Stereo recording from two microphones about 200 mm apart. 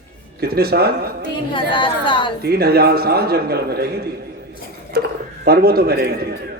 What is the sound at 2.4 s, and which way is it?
Speech, 50° right (ahead or behind).